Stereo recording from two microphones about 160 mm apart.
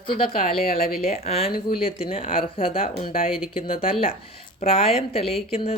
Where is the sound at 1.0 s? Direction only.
40° left (ahead or behind).